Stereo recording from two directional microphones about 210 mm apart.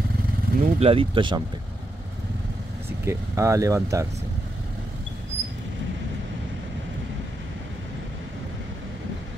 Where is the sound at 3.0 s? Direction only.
15° right (ahead or behind).